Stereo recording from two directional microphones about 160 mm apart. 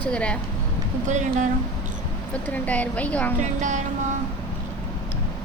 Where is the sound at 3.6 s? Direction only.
50° right (ahead or behind).